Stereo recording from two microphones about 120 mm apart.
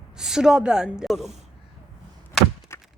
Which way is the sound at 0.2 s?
5° right (ahead or behind).